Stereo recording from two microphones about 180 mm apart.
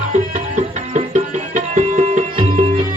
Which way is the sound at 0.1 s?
40° right (ahead or behind).